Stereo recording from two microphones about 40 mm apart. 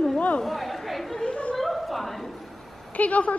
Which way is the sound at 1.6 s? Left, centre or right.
Centre.